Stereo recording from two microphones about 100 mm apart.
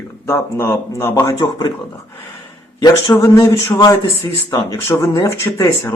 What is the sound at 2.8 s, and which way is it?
Speech, 40° left (ahead or behind).